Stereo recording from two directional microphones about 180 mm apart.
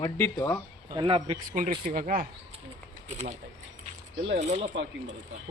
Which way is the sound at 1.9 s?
45° right (ahead or behind).